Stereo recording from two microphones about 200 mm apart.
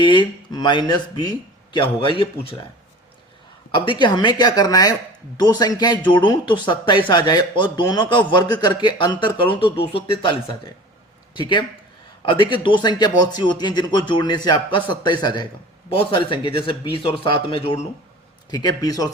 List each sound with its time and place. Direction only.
0.0 s speech: 25° left (ahead or behind)
3.7 s speech: 25° left (ahead or behind)
11.3 s speech: 25° left (ahead or behind)